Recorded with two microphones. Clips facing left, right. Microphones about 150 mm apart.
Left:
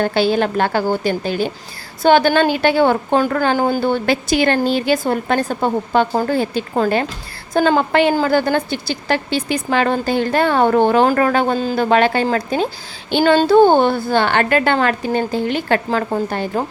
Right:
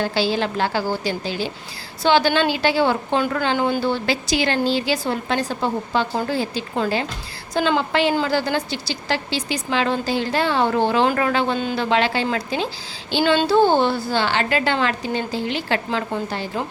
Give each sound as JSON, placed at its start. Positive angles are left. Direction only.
{"t": 0.0, "sound": "a woman's voice", "side_deg": 55}